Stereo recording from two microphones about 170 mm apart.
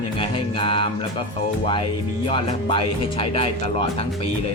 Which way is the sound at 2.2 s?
30° left (ahead or behind).